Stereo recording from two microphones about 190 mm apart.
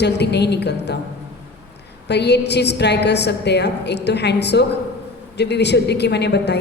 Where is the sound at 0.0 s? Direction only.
60° left (ahead or behind).